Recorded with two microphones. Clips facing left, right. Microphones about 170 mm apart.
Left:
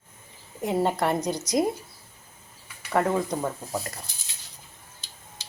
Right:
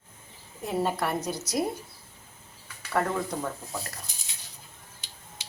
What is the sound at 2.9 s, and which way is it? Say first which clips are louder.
Speech: left 4 dB; 20° left (ahead or behind).